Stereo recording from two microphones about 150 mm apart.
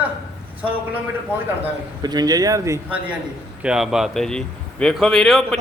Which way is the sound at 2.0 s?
25° right (ahead or behind).